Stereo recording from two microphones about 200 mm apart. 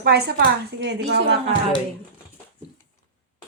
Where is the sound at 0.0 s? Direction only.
55° right (ahead or behind).